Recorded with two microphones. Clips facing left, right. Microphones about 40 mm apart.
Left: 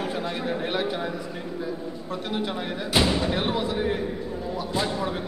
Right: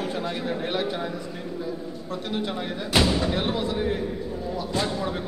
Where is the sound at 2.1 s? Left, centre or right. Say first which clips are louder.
Even; centre.